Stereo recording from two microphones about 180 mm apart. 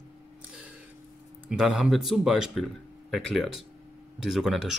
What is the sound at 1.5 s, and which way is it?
Speech, 5° right (ahead or behind).